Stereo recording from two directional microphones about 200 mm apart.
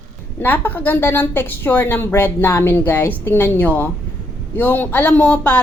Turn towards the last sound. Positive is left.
turn(degrees=10)  # may be behind; listen again after turning